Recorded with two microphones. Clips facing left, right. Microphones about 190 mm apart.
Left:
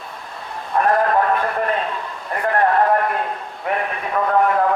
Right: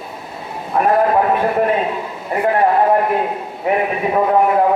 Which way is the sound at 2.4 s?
15° right (ahead or behind).